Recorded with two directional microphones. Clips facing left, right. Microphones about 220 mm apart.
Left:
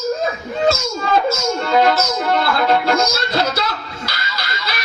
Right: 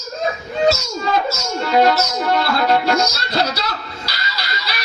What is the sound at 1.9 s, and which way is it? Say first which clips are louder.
Music: even; 50° left (ahead or behind).